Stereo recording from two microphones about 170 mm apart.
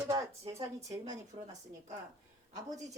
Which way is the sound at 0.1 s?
20° right (ahead or behind).